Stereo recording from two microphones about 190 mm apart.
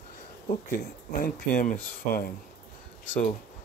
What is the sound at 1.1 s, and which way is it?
Speech, 50° left (ahead or behind).